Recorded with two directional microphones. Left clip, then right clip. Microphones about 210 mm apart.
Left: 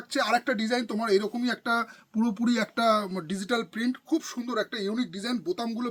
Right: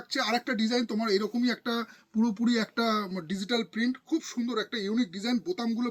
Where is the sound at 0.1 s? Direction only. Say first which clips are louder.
Left 3 dB; 30° left (ahead or behind).